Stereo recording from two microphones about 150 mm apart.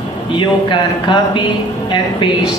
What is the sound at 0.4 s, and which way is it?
Speech, 30° left (ahead or behind).